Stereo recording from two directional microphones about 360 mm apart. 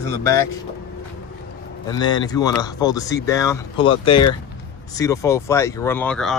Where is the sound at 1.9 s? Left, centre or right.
Centre.